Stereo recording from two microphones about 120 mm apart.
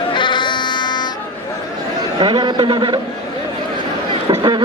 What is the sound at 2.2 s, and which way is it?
Speech, 45° right (ahead or behind).